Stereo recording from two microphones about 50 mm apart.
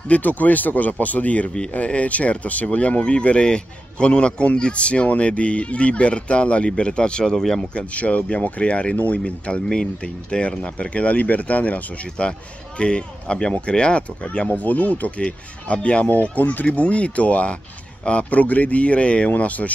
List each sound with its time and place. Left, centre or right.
0.1 s speech: left
7.3 s speech: centre
7.7 s speech: left
9.2 s speech: centre